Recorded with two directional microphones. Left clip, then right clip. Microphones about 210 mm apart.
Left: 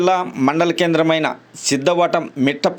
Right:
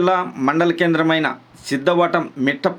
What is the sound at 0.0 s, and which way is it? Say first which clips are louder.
Speech: left 1 dB; 30° left (ahead or behind).